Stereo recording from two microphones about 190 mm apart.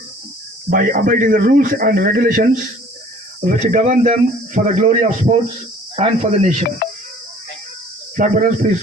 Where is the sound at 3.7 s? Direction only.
45° right (ahead or behind).